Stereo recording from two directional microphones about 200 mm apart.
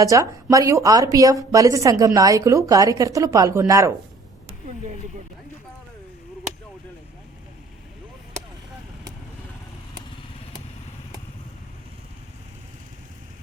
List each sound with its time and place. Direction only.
0.0 s a woman's voice: 15° right (ahead or behind)